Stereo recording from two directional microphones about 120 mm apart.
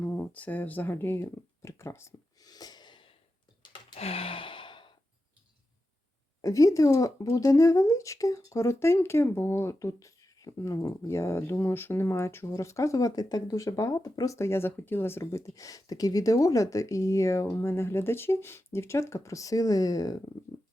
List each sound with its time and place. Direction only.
0.0 s a sound: 15° left (ahead or behind); by 3.1 s 40° left (ahead or behind)
3.9 s sigh: 55° left (ahead or behind)
6.4 s speech: 25° left (ahead or behind)